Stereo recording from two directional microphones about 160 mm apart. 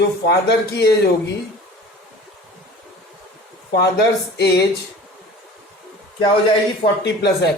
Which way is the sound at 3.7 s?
90° left.